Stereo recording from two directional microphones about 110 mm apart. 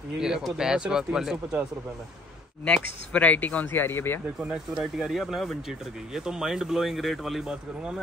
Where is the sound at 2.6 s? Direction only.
10° left (ahead or behind).